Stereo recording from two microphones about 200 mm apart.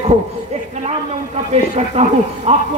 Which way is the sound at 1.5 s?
30° right (ahead or behind).